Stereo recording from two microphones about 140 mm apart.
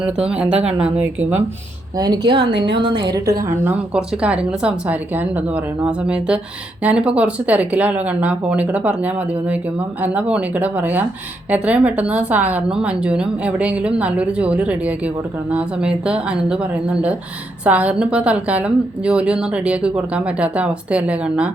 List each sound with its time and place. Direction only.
0.0 s a woman's voice: 5° right (ahead or behind)
2.0 s a woman's voice: 30° right (ahead or behind)
3.4 s a woman's voice: 15° right (ahead or behind)